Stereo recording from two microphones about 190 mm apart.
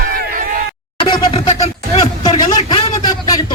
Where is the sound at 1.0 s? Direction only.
25° left (ahead or behind).